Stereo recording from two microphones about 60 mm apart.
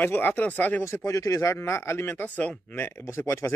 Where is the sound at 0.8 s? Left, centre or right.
Left.